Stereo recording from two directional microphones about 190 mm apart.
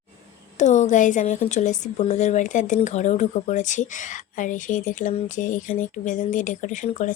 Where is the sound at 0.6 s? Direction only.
40° left (ahead or behind).